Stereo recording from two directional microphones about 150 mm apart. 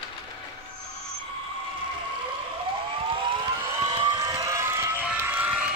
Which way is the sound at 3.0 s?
35° right (ahead or behind).